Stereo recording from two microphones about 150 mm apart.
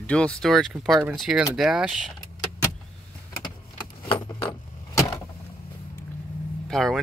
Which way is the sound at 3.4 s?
30° left (ahead or behind).